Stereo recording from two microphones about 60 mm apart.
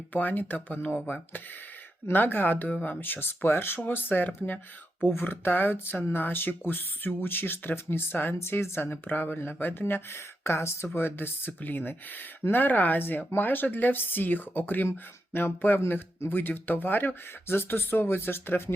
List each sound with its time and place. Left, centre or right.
0.1 s speech: left
14.8 s speech: left